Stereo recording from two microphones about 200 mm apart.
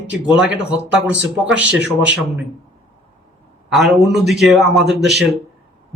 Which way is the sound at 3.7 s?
Centre (ahead or behind).